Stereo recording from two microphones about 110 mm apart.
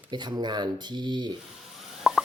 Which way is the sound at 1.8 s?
Centre (ahead or behind).